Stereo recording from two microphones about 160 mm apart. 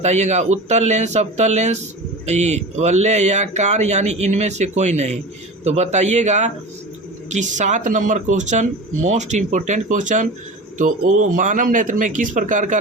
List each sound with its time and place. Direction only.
0.0 s speech: 45° right (ahead or behind)